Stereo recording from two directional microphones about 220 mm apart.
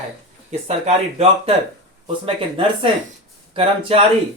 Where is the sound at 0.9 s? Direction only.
30° right (ahead or behind).